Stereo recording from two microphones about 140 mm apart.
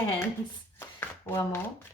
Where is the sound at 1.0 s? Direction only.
15° left (ahead or behind).